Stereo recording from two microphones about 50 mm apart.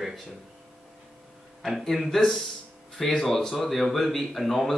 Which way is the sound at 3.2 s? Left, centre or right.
Centre.